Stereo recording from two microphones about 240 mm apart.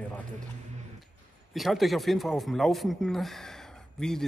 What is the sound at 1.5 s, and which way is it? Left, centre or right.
Speech, centre.